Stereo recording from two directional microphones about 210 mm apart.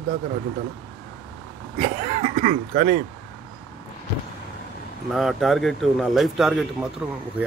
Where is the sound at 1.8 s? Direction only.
35° right (ahead or behind).